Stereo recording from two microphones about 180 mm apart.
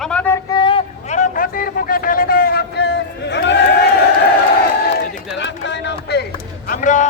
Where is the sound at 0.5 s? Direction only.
25° left (ahead or behind).